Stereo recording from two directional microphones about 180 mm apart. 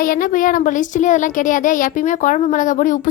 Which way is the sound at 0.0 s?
50° left (ahead or behind).